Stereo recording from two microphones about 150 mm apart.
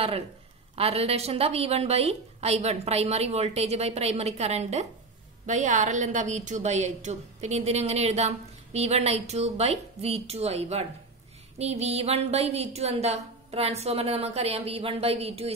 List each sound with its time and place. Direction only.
0.7 s a woman's voice: 40° right (ahead or behind)